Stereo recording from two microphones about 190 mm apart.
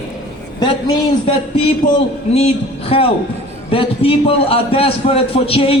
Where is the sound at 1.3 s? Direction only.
30° left (ahead or behind).